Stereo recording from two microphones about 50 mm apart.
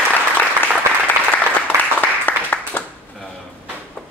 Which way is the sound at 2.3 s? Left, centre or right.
Left.